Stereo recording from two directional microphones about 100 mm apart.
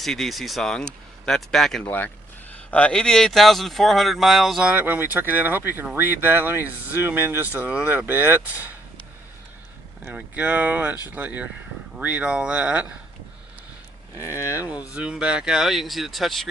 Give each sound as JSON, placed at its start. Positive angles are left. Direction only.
{"t": 0.0, "sound": "speech", "side_deg": 5}
{"t": 1.8, "sound": "speech", "side_deg": 15}
{"t": 4.7, "sound": "speech", "side_deg": -20}
{"t": 10.2, "sound": "speech", "side_deg": -15}
{"t": 14.7, "sound": "speech", "side_deg": -10}